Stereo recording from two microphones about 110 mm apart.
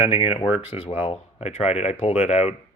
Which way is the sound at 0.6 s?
75° left (ahead or behind).